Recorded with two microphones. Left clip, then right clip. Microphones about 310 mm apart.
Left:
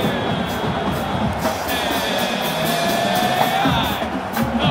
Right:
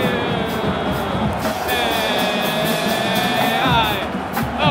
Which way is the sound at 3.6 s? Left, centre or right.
Right.